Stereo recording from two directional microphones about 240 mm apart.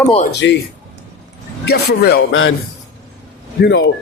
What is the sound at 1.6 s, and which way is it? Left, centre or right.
Speech, left.